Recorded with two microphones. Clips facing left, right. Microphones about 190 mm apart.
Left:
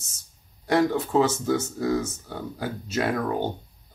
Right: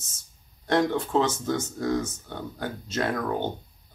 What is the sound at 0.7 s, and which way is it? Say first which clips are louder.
Speech: left 2 dB; 10° left (ahead or behind).